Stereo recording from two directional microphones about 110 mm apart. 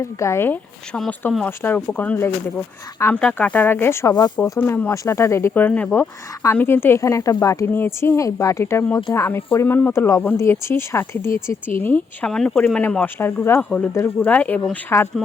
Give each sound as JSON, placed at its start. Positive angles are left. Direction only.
{"t": 0.0, "sound": "speech", "side_deg": 25}
{"t": 7.7, "sound": "speech", "side_deg": 20}